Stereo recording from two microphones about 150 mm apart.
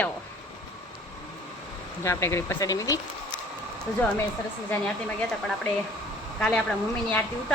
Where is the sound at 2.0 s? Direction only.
20° left (ahead or behind).